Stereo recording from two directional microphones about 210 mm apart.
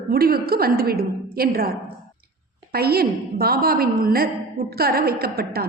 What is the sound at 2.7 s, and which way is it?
A woman's voice, 45° right (ahead or behind).